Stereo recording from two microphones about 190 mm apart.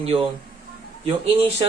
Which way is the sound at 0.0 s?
30° right (ahead or behind).